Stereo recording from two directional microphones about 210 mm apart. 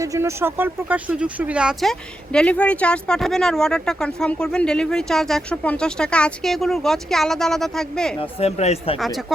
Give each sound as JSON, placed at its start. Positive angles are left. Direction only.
{"t": 0.0, "sound": "speech", "side_deg": -15}
{"t": 8.2, "sound": "speech", "side_deg": 30}
{"t": 9.0, "sound": "speech", "side_deg": 0}